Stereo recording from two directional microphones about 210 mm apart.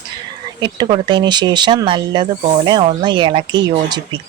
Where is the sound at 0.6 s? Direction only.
20° right (ahead or behind).